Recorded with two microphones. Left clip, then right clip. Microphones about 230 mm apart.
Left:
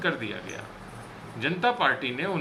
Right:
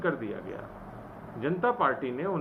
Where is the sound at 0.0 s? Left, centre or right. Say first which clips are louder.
Left 2 dB; left.